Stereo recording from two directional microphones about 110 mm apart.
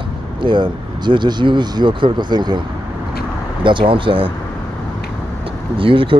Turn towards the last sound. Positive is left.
turn(degrees=-50)  # may be behind; listen again after turning